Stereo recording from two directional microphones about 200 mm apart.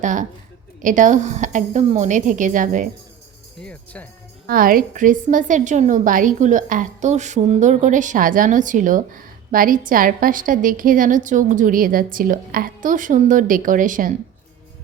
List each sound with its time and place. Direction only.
0.0 s a woman's voice: 40° right (ahead or behind)
3.6 s music: 5° left (ahead or behind)
4.4 s a woman's voice: 45° right (ahead or behind)